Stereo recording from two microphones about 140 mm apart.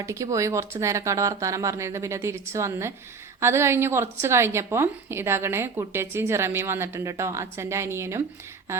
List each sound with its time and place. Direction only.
0.0 s a woman's voice: 20° right (ahead or behind)